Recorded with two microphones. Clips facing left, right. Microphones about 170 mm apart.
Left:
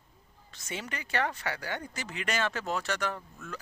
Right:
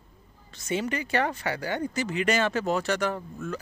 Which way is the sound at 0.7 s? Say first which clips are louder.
Right 9 dB; 5° right (ahead or behind).